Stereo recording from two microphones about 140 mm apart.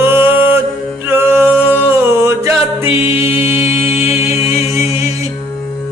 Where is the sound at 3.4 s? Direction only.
20° right (ahead or behind).